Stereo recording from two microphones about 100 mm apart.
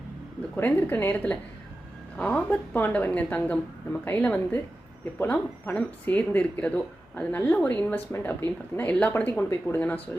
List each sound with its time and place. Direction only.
0.5 s speech: 20° left (ahead or behind)